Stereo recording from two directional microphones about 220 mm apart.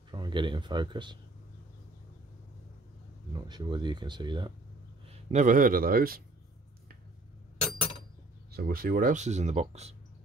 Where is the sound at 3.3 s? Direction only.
20° right (ahead or behind).